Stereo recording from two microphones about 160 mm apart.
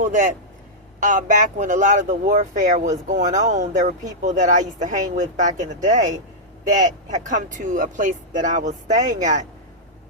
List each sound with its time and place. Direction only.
0.0 s a man's voice: 50° right (ahead or behind)